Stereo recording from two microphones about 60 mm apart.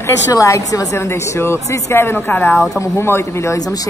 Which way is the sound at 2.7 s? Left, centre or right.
Left.